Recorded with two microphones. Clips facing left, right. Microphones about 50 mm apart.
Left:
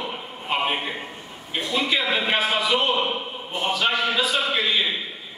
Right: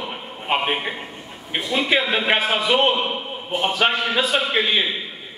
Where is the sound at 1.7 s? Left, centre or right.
Right.